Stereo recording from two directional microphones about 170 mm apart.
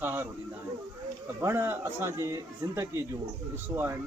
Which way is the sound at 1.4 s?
15° right (ahead or behind).